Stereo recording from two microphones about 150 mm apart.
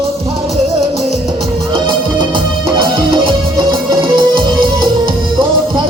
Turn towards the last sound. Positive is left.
turn(degrees=-35)  # may be behind; listen again after turning